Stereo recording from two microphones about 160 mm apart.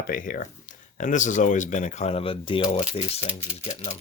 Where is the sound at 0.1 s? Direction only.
60° left (ahead or behind); by 3.2 s 45° left (ahead or behind).